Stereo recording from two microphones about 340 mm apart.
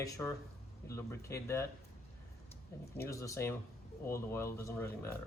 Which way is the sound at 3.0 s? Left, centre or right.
Centre.